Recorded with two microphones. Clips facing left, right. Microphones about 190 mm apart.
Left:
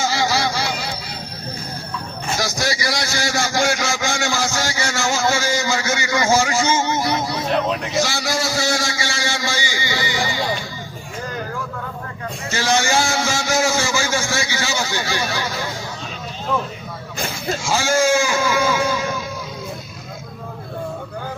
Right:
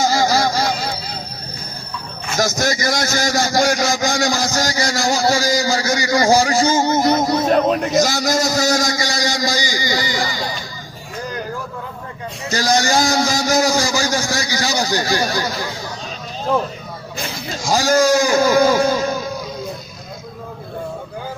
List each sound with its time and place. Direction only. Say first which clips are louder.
0.0 s a sound: right 4 dB; 40° right (ahead or behind)
2.3 s a man's voice: right 4 dB; 45° right (ahead or behind)
12.5 s a man's voice: right 2 dB; 40° right (ahead or behind)
17.6 s speech: right 4 dB; 40° right (ahead or behind)